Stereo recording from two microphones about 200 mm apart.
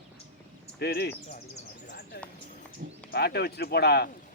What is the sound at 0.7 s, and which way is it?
Speech, 55° left (ahead or behind).